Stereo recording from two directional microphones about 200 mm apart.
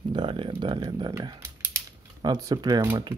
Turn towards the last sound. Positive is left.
turn(degrees=-20)  # may be behind; listen again after turning